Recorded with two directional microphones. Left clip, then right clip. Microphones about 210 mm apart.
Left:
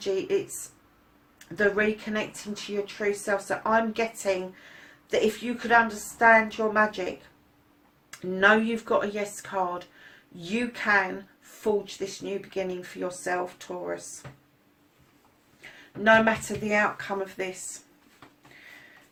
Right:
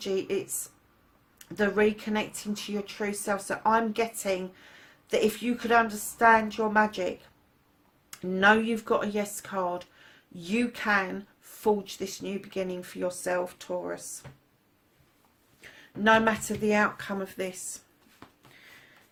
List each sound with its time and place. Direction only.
0.0 s speech: 45° right (ahead or behind)
1.5 s speech: 45° right (ahead or behind)
5.5 s speech: 45° right (ahead or behind)
8.1 s speech: 45° right (ahead or behind)
16.0 s speech: 45° right (ahead or behind)